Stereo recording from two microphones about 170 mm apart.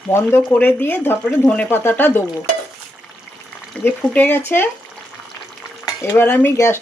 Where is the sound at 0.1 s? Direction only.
15° left (ahead or behind).